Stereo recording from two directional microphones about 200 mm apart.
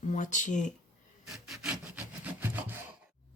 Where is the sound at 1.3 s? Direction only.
Centre (ahead or behind).